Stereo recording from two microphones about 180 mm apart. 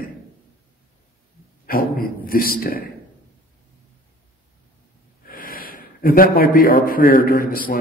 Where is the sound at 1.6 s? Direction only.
55° left (ahead or behind).